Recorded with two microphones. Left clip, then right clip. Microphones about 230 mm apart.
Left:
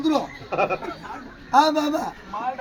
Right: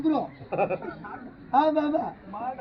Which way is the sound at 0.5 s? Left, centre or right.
Left.